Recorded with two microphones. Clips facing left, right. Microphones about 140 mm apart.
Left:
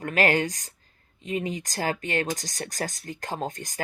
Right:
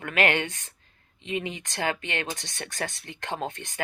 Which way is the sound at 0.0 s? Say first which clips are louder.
Left 2 dB; 35° left (ahead or behind).